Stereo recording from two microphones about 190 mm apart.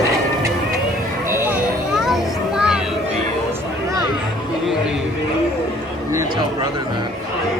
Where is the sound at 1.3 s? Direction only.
10° right (ahead or behind).